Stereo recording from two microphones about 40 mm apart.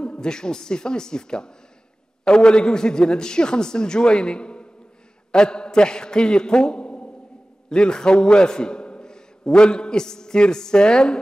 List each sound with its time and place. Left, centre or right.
0.0 s a man's voice: left